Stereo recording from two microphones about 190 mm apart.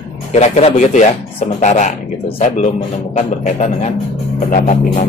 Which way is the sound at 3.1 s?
35° left (ahead or behind).